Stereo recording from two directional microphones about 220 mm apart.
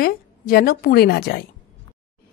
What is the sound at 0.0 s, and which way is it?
Speech, 45° left (ahead or behind).